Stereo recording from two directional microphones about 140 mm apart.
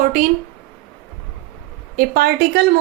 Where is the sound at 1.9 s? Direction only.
90° right.